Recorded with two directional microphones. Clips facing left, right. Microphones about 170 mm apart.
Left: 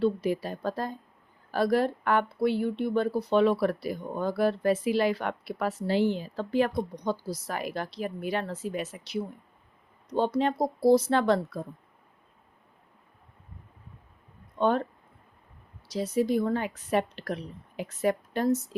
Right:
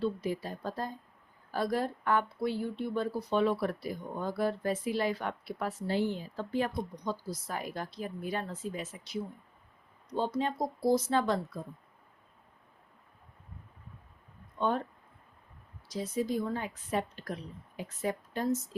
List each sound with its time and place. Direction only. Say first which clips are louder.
0.0 s speech: left 6 dB; 70° left (ahead or behind)
14.6 s speech: left 6 dB; 75° left (ahead or behind)
15.9 s speech: left 6 dB; 75° left (ahead or behind)